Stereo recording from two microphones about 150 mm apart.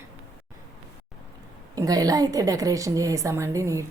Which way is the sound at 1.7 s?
25° right (ahead or behind).